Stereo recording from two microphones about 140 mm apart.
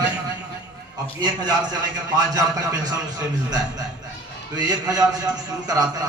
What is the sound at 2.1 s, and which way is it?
Speech, 25° right (ahead or behind).